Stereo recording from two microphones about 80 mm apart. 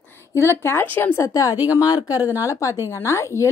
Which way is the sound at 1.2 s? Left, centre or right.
Left.